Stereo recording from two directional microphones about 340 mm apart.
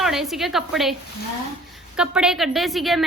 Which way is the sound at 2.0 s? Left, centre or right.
Centre.